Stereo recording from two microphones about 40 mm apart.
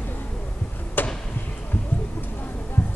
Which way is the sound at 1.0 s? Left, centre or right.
Left.